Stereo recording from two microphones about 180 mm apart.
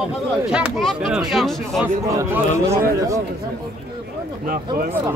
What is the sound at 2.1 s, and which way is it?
Speech, 15° right (ahead or behind).